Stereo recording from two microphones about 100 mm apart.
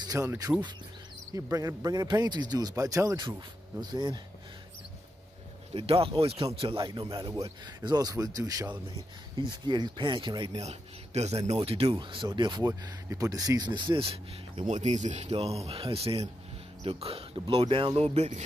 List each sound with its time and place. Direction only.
0.0 s insect: 35° right (ahead or behind)
0.5 s speech: 10° right (ahead or behind)
1.3 s a man's voice: 35° right (ahead or behind)
3.8 s speech: 45° right (ahead or behind)
5.7 s speech: 75° right (ahead or behind)
6.8 s a man's voice: 55° right (ahead or behind); by 8.7 s 40° right (ahead or behind)
9.5 s speech: 50° right (ahead or behind)
10.5 s speech: 90° right
12.0 s speech: 55° right (ahead or behind)
15.1 s speech: 85° right; by 17.8 s 65° right (ahead or behind)
17.9 s speech: 85° right